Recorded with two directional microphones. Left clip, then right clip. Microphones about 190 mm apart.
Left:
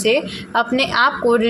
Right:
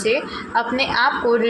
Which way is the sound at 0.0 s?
35° left (ahead or behind).